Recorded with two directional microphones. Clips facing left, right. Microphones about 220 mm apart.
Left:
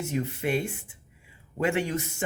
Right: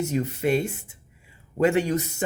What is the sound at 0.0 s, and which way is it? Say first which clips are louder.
Speech: right 4 dB; 40° right (ahead or behind).